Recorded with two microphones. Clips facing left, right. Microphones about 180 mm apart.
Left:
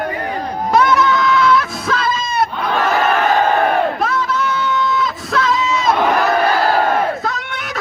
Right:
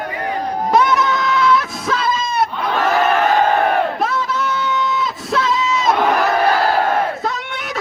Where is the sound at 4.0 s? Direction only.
25° right (ahead or behind).